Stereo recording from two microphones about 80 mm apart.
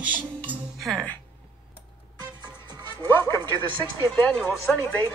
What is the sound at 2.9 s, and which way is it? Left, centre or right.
Speech, left.